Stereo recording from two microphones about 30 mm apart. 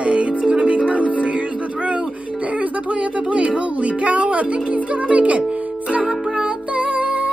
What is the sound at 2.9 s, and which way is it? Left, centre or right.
Music, right.